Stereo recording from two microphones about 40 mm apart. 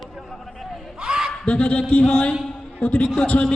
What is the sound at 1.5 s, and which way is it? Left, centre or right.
Speech, left.